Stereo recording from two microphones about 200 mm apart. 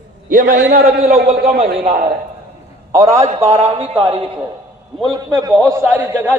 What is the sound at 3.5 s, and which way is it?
Speech, 30° right (ahead or behind).